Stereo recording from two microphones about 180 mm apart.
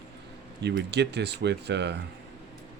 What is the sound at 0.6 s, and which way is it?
Speech, 70° right (ahead or behind).